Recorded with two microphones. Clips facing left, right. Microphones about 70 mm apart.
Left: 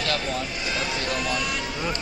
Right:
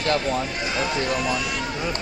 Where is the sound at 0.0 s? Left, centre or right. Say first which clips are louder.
Right 4 dB; right.